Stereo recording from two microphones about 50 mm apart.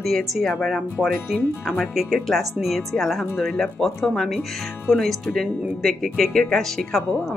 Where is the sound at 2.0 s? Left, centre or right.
Centre.